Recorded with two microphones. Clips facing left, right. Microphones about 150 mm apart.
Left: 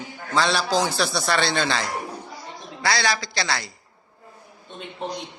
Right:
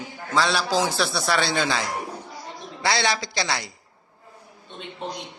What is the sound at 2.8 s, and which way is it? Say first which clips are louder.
Speech: even; 20° right (ahead or behind).